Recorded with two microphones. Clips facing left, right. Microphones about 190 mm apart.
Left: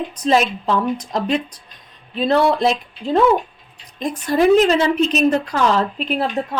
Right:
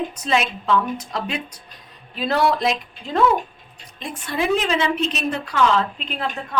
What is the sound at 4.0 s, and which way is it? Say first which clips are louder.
A woman's voice: left 9 dB; 40° left (ahead or behind).